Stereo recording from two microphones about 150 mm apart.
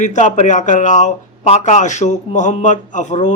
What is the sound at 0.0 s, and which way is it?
A man's voice, 55° left (ahead or behind).